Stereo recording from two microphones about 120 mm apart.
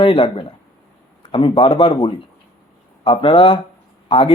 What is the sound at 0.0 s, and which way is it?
Speech, 45° left (ahead or behind).